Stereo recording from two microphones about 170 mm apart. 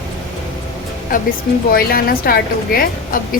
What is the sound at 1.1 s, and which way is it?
A woman's voice, 55° left (ahead or behind).